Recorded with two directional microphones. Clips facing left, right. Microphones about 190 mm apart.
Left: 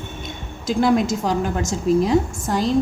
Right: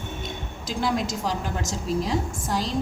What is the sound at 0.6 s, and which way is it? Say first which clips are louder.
A woman's voice: left 8 dB; 50° left (ahead or behind).